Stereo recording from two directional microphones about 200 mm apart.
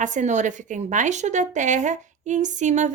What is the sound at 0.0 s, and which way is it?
A woman's voice, 40° right (ahead or behind).